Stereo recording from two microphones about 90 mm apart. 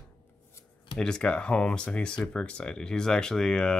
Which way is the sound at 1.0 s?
10° left (ahead or behind).